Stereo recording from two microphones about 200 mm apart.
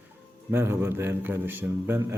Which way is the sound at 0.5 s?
10° right (ahead or behind).